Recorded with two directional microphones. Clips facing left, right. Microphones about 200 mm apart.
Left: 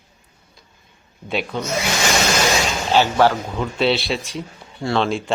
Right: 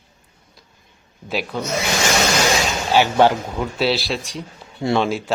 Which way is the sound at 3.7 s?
Centre (ahead or behind).